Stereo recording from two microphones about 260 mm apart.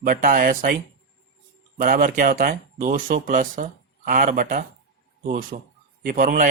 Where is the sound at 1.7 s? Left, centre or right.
Right.